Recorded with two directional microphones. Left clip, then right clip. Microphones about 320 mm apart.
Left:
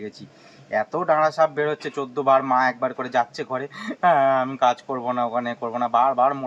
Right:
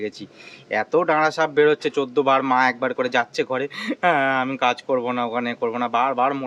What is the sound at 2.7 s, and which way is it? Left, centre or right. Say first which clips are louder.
Speech: right 2 dB; centre.